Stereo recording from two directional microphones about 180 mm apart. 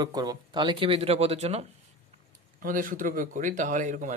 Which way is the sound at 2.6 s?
50° right (ahead or behind).